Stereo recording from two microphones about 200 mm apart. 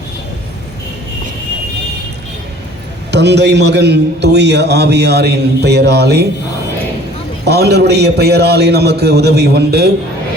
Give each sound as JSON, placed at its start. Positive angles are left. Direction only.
{"t": 3.1, "sound": "a man's voice", "side_deg": -60}
{"t": 7.4, "sound": "a man's voice", "side_deg": -55}